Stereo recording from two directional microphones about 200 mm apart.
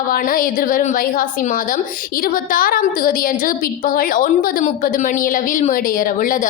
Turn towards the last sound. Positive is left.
turn(degrees=45)  # may be behind; listen again after turning